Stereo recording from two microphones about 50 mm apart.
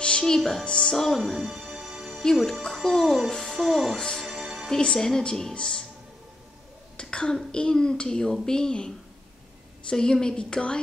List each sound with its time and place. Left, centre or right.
0.2 s a child's voice: centre
1.4 s music: centre
2.3 s speech: centre
3.3 s music: centre
3.5 s a child's voice: centre
4.3 s music: centre
4.6 s a child's voice: centre
7.0 s cough: centre
7.5 s a child's voice: centre